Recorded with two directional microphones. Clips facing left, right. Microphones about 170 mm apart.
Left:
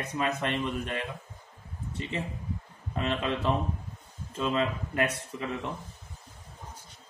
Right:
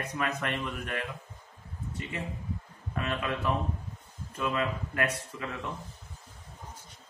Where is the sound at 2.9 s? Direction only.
25° left (ahead or behind).